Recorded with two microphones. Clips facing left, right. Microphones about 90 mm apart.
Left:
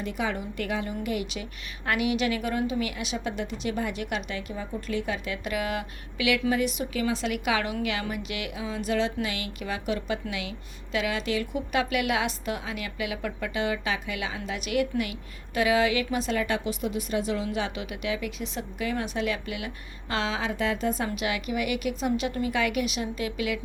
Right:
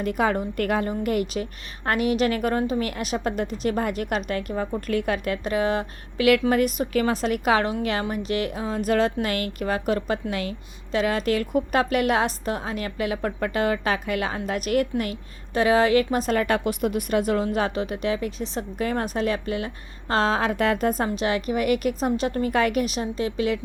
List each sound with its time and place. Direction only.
0.0 s a woman's voice: 50° right (ahead or behind)
5.4 s a woman's voice: 35° right (ahead or behind); by 21.1 s 50° right (ahead or behind)
21.2 s speech: 40° right (ahead or behind)